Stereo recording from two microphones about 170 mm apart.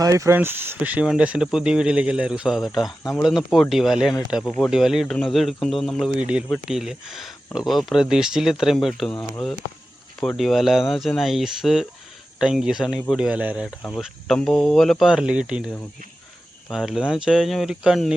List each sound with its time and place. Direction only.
0.0 s speech: 20° right (ahead or behind); by 9.1 s centre (ahead or behind)
9.1 s speech: 15° left (ahead or behind)
10.2 s speech: centre (ahead or behind)